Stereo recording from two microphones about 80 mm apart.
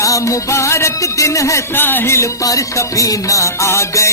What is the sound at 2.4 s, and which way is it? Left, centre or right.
Music, left.